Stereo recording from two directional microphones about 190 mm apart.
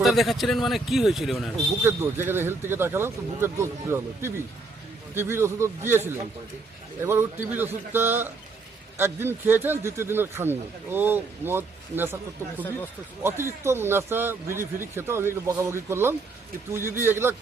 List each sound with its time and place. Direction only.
0.0 s a man's voice: centre (ahead or behind)
1.8 s speech: 10° right (ahead or behind)
13.2 s speech: 15° right (ahead or behind)